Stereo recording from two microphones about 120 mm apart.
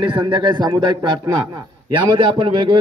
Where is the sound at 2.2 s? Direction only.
45° right (ahead or behind).